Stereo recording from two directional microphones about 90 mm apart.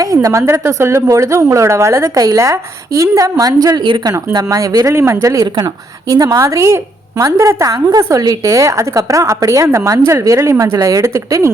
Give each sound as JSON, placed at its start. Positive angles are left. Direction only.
{"t": 0.0, "sound": "a woman's voice", "side_deg": -40}
{"t": 4.9, "sound": "a woman's voice", "side_deg": -30}